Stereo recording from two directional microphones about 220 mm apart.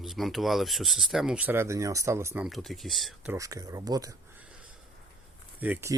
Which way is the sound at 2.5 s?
Centre (ahead or behind).